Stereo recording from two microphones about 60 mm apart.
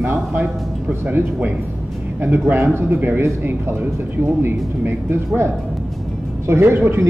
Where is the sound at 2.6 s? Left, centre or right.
Right.